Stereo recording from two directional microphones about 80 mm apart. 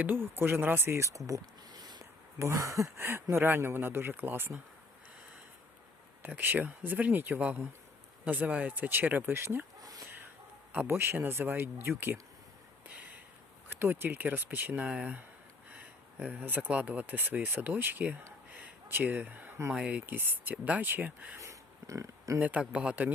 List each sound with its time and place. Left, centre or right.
0.0 s speech: right
1.7 s a sound: right
2.4 s speech: right
6.2 s speech: right
10.8 s speech: right
12.9 s a sound: centre
13.7 s speech: right
21.3 s a sound: right
22.4 s speech: centre